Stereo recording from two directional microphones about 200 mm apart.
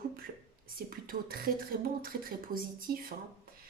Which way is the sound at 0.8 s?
45° right (ahead or behind).